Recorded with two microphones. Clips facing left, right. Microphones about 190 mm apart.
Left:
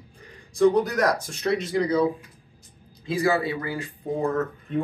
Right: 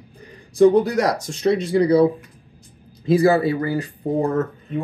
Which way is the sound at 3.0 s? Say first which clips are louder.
Right 8 dB; 35° right (ahead or behind).